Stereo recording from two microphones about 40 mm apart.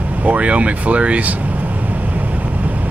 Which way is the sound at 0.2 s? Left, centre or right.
Right.